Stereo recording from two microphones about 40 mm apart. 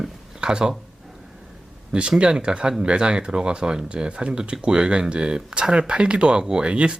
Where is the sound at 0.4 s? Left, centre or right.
Centre.